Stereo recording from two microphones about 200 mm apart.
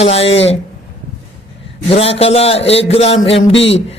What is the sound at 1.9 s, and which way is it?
A man's voice, 30° left (ahead or behind).